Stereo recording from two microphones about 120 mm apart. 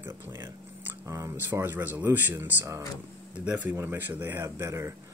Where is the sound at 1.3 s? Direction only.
15° right (ahead or behind).